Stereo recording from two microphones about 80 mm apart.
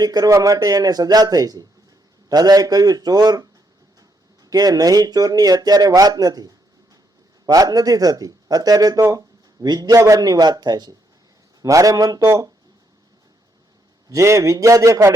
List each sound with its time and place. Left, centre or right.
0.0 s speech: right
4.4 s speech: right
9.6 s a man's voice: right
11.6 s speech: right
14.1 s a man's voice: right